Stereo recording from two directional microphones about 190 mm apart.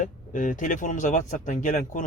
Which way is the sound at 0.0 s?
45° left (ahead or behind).